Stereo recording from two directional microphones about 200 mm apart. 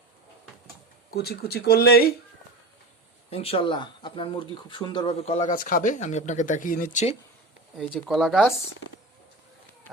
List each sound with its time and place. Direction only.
1.1 s speech: 50° left (ahead or behind)
3.2 s speech: 30° left (ahead or behind)
5.5 s speech: 40° left (ahead or behind)
7.8 s speech: centre (ahead or behind)